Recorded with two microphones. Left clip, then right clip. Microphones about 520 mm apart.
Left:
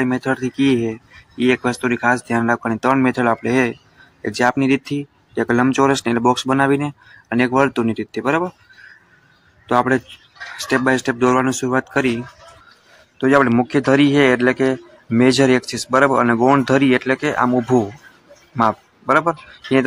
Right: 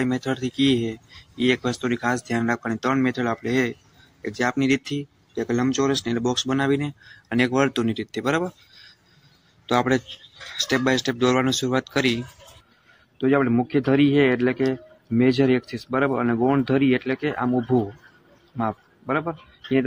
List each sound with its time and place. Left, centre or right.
0.0 s speech: right
13.2 s speech: right